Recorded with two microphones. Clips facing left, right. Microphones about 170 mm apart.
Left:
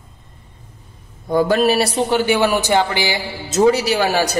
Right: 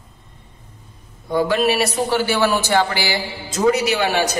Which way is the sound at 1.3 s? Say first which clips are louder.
Left 3 dB; 40° left (ahead or behind).